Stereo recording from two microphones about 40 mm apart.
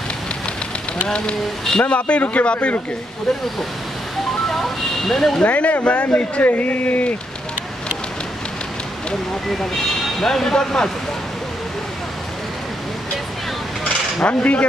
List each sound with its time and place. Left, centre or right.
1.0 s speech: left
5.0 s speech: centre
5.4 s speech: left
9.6 s speech: centre
14.2 s speech: left